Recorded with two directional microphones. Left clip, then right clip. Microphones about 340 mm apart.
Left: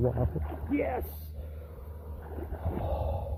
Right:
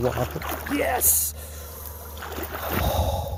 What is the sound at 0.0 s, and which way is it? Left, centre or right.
Speech, right.